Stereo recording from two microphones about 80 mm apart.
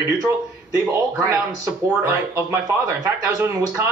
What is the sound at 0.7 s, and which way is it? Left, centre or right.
Speech, right.